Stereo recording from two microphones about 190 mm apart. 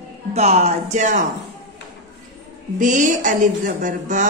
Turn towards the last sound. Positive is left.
turn(degrees=-45)  # may be behind; listen again after turning